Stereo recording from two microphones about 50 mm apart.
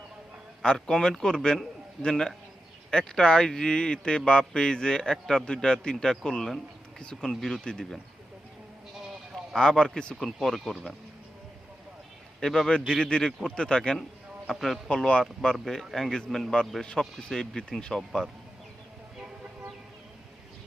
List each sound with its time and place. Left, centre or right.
0.6 s a man's voice: centre
9.6 s a man's voice: centre
10.2 s speech: centre
12.4 s a man's voice: centre
14.5 s speech: centre
14.8 s a man's voice: centre
15.2 s a man's voice: centre